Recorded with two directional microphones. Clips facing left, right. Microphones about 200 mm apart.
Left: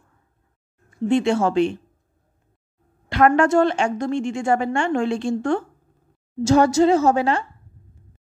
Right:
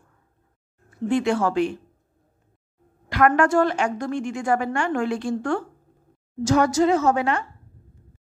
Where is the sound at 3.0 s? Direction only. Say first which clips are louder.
Left 2 dB; 25° left (ahead or behind).